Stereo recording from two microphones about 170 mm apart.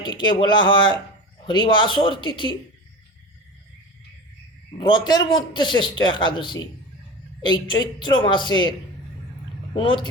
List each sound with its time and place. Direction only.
0.0 s a man's voice: 25° left (ahead or behind)
4.8 s a man's voice: 25° left (ahead or behind)
9.7 s a man's voice: 30° left (ahead or behind)